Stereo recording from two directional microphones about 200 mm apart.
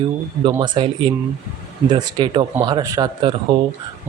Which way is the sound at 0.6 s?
25° right (ahead or behind).